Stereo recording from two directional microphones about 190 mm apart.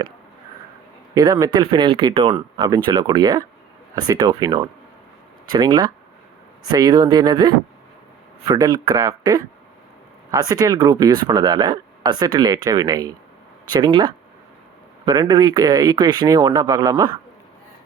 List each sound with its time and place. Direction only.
1.1 s speech: 20° right (ahead or behind)